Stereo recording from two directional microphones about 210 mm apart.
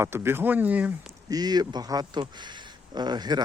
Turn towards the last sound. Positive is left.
turn(degrees=-20)  # may be behind; listen again after turning